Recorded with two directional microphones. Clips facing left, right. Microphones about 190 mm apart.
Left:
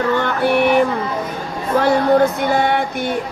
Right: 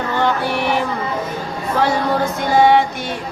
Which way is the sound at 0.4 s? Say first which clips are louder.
Left 5 dB; 60° left (ahead or behind).